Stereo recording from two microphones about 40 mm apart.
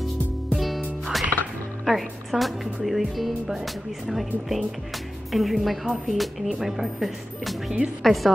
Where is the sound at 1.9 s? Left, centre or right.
Centre.